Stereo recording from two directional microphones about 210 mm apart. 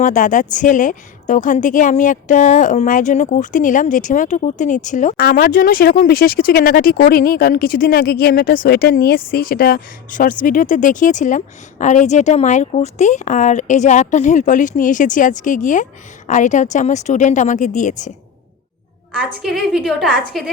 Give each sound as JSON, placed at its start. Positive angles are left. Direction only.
{"t": 0.0, "sound": "a woman's voice", "side_deg": 35}
{"t": 19.4, "sound": "a woman's voice", "side_deg": 0}